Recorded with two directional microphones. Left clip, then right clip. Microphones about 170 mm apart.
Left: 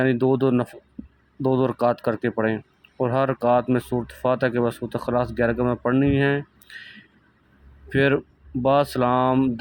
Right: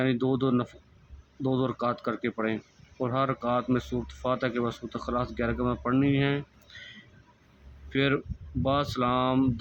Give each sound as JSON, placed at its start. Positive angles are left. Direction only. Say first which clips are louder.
{"t": 0.0, "sound": "speech", "louder": "left 7 dB", "side_deg": 30}
{"t": 7.9, "sound": "speech", "louder": "left 7 dB", "side_deg": 30}